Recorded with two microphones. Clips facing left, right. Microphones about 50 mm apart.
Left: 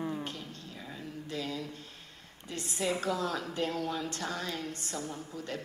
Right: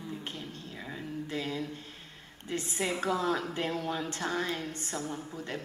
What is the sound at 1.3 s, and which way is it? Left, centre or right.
Mantra, right.